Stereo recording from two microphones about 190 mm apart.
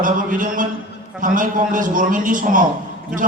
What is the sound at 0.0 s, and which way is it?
A man's voice, 45° right (ahead or behind).